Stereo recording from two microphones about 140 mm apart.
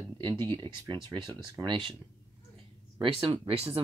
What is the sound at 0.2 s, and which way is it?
Speech, 35° right (ahead or behind).